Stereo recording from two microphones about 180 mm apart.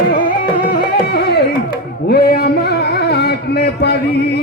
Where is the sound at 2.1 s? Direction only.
60° left (ahead or behind).